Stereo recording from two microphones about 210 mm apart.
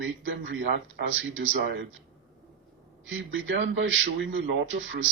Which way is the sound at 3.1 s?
65° right (ahead or behind).